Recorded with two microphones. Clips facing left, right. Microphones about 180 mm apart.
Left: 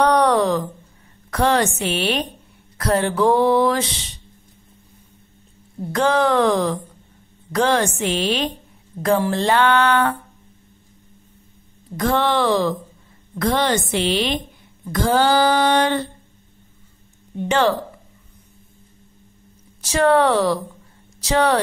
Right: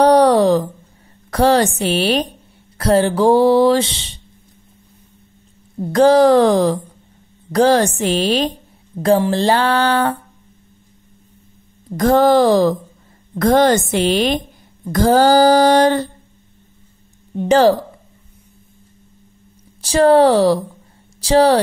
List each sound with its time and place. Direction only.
0.0 s a sound: 35° right (ahead or behind)
1.3 s speech: 35° right (ahead or behind)
5.9 s speech: 35° right (ahead or behind)
8.9 s speech: 65° right (ahead or behind)
9.3 s speech: 35° right (ahead or behind)
12.0 s a woman's voice: 40° right (ahead or behind)
17.4 s speech: 35° right (ahead or behind)
19.8 s speech: 30° right (ahead or behind)